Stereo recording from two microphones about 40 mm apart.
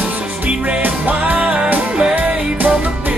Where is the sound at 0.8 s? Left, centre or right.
Right.